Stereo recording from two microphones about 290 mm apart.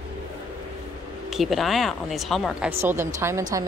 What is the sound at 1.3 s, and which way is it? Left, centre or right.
Speech, centre.